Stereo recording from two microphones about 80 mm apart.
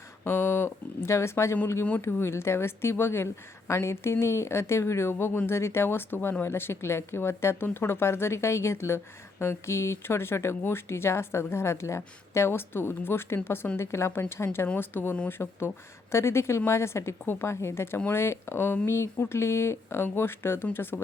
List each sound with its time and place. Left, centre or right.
0.3 s speech: left